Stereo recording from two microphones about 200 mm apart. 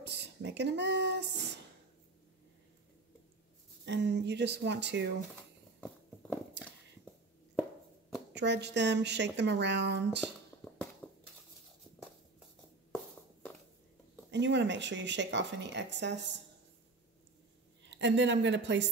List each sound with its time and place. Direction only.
0.0 s speech: 60° right (ahead or behind)
3.8 s speech: 60° right (ahead or behind)
8.4 s speech: 60° right (ahead or behind)
10.2 s a sound: 5° left (ahead or behind)
14.3 s speech: 60° right (ahead or behind)
17.8 s a woman's voice: 65° right (ahead or behind)